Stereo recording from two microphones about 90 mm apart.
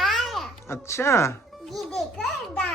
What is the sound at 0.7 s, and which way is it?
Speech, 30° left (ahead or behind).